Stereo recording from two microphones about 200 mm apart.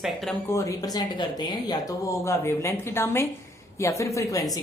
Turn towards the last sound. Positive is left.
turn(degrees=15)  # may be behind; listen again after turning